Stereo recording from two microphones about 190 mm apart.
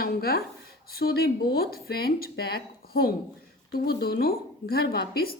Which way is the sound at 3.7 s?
55° left (ahead or behind).